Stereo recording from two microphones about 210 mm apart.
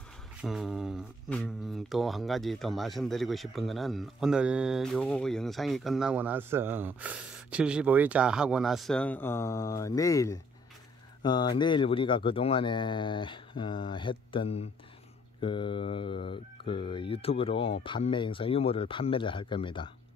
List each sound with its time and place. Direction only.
0.4 s speech: centre (ahead or behind); by 19.9 s 25° left (ahead or behind)